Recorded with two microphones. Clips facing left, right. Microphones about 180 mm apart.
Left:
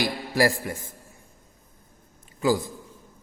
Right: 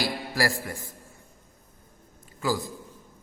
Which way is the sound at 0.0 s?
20° left (ahead or behind).